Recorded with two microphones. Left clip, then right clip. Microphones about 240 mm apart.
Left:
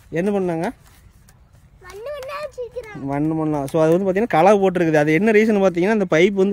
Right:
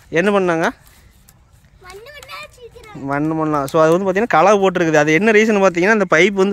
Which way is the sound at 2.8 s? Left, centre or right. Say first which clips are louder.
Right 4 dB; centre.